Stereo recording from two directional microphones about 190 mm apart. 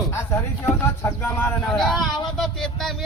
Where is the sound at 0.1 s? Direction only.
15° left (ahead or behind).